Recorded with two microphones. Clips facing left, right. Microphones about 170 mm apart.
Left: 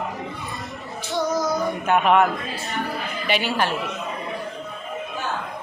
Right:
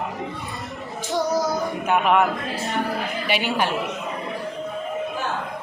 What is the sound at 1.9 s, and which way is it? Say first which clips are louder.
Speech: left 1 dB; 5° right (ahead or behind).